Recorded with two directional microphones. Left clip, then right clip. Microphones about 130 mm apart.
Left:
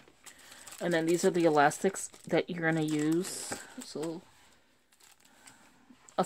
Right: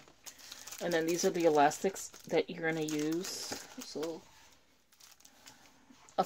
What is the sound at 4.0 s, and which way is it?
Speech, 90° left.